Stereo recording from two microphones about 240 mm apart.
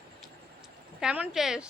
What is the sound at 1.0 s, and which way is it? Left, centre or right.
Speech, centre.